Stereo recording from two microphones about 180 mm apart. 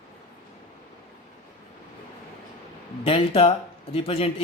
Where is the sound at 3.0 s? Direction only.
30° left (ahead or behind).